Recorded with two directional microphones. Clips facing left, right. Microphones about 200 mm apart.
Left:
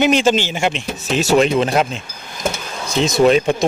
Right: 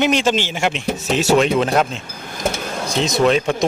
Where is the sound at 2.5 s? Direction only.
50° right (ahead or behind).